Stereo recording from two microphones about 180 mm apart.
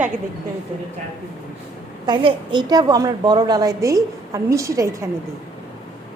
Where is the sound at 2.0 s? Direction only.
25° right (ahead or behind).